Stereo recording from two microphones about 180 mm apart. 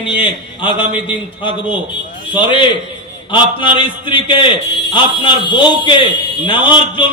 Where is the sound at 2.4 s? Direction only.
30° left (ahead or behind).